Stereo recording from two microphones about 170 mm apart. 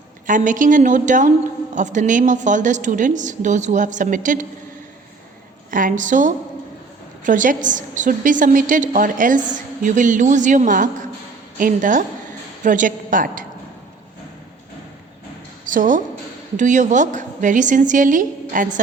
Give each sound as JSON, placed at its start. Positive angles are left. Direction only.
{"t": 0.3, "sound": "a woman's voice", "side_deg": -50}
{"t": 6.0, "sound": "a woman's voice", "side_deg": -50}
{"t": 15.6, "sound": "a woman's voice", "side_deg": -50}